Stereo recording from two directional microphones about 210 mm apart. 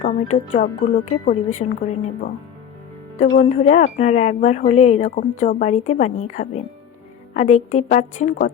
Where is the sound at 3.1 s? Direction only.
35° left (ahead or behind).